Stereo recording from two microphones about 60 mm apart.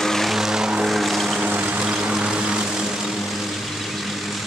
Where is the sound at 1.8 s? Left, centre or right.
Centre.